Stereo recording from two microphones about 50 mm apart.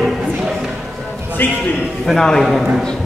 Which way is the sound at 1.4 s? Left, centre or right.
Left.